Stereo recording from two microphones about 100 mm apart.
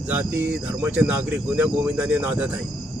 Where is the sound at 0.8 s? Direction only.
20° right (ahead or behind).